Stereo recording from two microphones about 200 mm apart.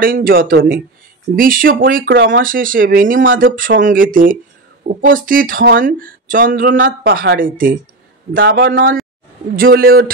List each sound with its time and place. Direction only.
0.0 s speech: 45° right (ahead or behind)
2.1 s speech: 65° right (ahead or behind)
2.4 s speech: 45° right (ahead or behind)